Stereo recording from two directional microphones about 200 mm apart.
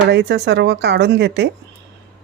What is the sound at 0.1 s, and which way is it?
Speech, 55° right (ahead or behind).